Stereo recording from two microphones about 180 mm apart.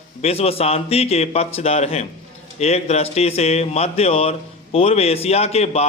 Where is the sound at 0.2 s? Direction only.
35° left (ahead or behind).